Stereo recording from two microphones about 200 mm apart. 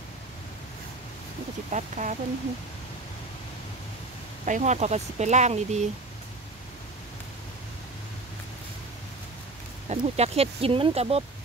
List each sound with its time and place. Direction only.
1.7 s speech: 35° right (ahead or behind)
4.5 s speech: 35° right (ahead or behind)
9.8 s speech: 35° right (ahead or behind)